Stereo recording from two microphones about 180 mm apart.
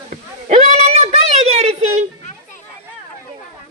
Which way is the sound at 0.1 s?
40° right (ahead or behind).